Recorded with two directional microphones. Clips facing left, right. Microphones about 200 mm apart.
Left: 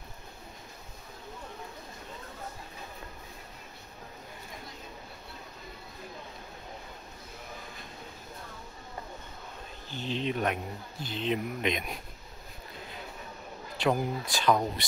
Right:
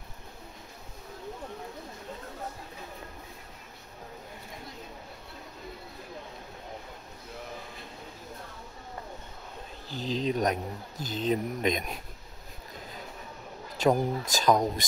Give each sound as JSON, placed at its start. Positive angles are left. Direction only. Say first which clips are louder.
{"t": 9.8, "sound": "speech", "louder": "right 3 dB", "side_deg": -35}
{"t": 13.7, "sound": "speech", "louder": "right 3 dB", "side_deg": -40}